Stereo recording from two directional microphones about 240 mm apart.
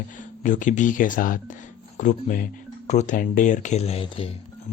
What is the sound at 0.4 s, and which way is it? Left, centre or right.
Speech, left.